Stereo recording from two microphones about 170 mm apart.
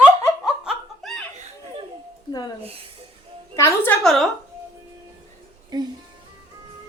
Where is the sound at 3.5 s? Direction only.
15° left (ahead or behind).